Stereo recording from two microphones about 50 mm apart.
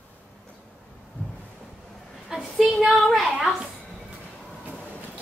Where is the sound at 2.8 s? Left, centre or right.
Centre.